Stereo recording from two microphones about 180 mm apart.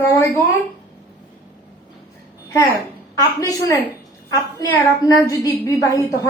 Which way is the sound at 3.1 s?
20° left (ahead or behind).